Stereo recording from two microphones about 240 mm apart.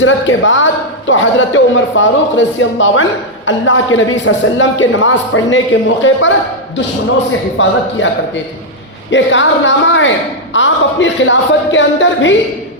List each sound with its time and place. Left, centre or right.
0.0 s speech: left
7.6 s speech: left